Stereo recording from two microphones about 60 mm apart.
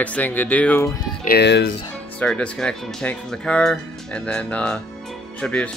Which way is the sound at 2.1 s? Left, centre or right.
Centre.